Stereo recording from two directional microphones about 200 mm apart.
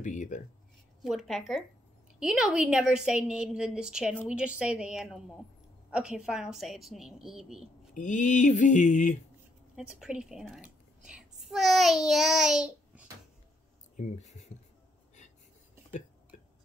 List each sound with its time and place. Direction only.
0.0 s speech: 40° left (ahead or behind)
1.0 s a woman's voice: centre (ahead or behind)
7.9 s a sound: 40° left (ahead or behind)
9.8 s a child's voice: 5° right (ahead or behind)
13.9 s speech: 35° left (ahead or behind)